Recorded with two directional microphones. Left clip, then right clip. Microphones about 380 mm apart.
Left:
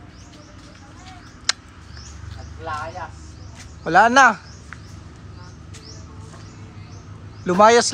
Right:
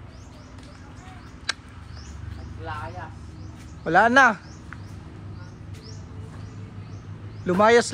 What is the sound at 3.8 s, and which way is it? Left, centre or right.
Speech, centre.